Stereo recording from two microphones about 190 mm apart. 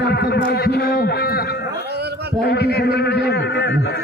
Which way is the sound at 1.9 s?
60° right (ahead or behind).